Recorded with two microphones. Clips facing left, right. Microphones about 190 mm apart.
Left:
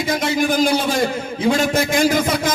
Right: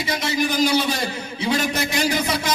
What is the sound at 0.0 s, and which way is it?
A man's voice, 50° left (ahead or behind).